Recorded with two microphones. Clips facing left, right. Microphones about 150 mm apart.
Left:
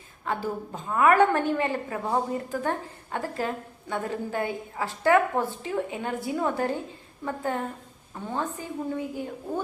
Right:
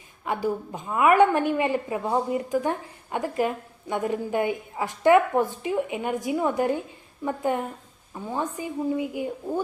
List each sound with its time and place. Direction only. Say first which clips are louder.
0.3 s a woman's voice: right 3 dB; 15° right (ahead or behind)